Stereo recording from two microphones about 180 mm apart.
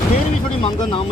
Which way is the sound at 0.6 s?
30° left (ahead or behind).